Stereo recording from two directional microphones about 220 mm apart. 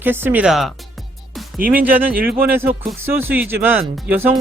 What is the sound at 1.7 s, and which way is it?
Speech, 5° right (ahead or behind).